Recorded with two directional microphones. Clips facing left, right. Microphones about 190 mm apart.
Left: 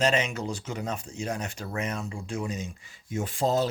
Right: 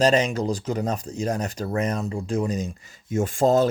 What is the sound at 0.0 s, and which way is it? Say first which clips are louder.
Speech: right 6 dB; 35° right (ahead or behind).